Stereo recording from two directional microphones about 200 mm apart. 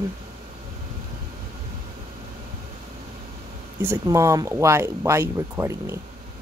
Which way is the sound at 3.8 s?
15° right (ahead or behind).